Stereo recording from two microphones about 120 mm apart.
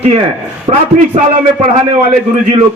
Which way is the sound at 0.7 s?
75° right (ahead or behind).